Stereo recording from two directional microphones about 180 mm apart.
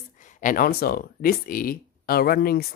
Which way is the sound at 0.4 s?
50° left (ahead or behind).